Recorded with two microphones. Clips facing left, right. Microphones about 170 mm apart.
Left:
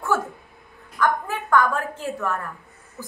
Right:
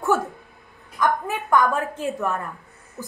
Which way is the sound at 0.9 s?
15° right (ahead or behind).